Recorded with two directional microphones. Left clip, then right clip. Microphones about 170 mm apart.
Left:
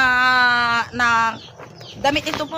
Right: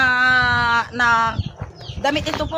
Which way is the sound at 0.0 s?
10° left (ahead or behind).